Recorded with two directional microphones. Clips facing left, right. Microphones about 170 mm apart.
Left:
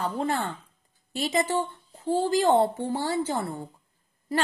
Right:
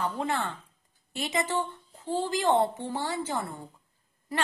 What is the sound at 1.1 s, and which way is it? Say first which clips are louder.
A woman's voice: left 4 dB; 35° left (ahead or behind).